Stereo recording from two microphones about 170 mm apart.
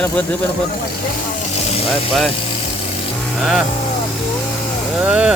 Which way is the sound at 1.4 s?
40° left (ahead or behind).